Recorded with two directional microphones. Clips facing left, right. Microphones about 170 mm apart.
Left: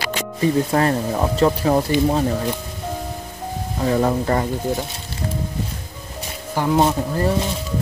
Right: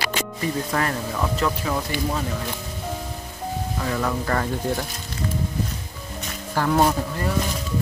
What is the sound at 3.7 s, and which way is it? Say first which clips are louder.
Speech: left 8 dB; 30° left (ahead or behind).